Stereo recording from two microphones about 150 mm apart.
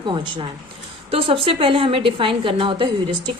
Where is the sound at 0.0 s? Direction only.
30° right (ahead or behind).